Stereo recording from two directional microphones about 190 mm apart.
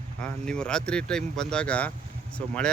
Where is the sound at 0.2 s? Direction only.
5° left (ahead or behind).